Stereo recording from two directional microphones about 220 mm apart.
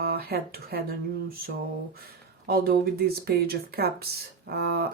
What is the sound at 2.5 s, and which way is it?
Speech, 45° right (ahead or behind).